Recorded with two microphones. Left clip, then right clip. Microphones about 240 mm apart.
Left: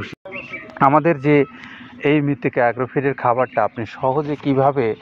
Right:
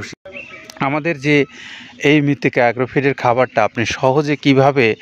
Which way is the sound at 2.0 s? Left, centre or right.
Right.